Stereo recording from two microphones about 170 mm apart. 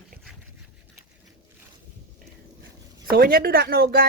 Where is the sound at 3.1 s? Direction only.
60° right (ahead or behind).